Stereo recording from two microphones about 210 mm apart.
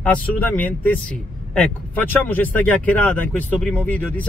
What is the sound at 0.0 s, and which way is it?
Speech, 5° left (ahead or behind).